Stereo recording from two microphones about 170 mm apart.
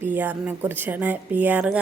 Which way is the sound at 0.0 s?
10° right (ahead or behind).